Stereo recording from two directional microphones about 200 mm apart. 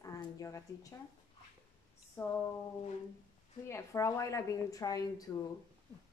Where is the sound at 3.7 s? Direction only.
15° left (ahead or behind).